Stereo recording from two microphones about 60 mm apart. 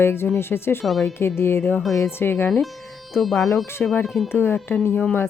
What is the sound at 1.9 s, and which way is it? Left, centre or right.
Speech, left.